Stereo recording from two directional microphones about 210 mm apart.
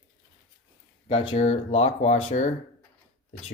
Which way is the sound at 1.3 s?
30° left (ahead or behind).